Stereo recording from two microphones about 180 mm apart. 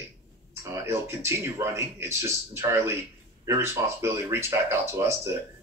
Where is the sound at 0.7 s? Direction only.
15° right (ahead or behind).